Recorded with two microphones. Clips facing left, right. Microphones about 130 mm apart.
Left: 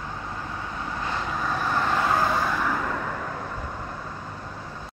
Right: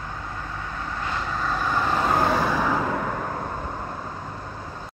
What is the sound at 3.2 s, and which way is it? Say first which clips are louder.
Vehicle: right 3 dB; 40° right (ahead or behind).